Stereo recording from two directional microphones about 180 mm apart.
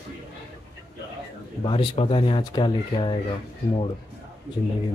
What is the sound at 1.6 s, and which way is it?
Speech, 30° left (ahead or behind).